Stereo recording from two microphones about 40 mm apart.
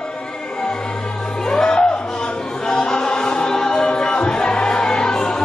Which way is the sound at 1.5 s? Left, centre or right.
Centre.